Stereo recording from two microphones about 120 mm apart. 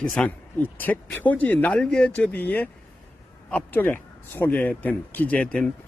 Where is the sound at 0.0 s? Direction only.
10° left (ahead or behind).